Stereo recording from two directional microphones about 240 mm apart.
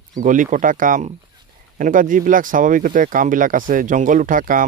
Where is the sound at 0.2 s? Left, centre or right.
Right.